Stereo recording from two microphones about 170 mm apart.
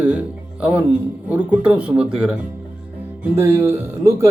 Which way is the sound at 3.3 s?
15° right (ahead or behind).